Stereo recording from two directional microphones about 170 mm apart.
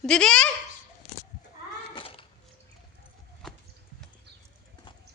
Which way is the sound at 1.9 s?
30° left (ahead or behind).